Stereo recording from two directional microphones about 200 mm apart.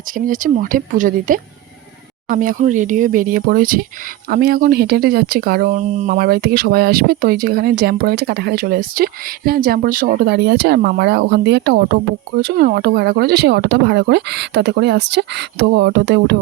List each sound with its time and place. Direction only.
0.3 s speech: 45° right (ahead or behind)